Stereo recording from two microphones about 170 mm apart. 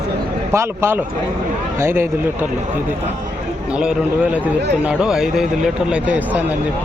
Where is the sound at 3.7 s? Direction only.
5° right (ahead or behind).